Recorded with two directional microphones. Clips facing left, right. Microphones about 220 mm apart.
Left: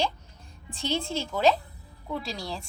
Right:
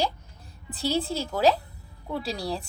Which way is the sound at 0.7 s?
35° right (ahead or behind).